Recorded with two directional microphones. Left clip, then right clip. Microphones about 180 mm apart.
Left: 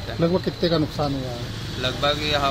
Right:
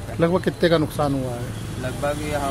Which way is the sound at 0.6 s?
20° right (ahead or behind).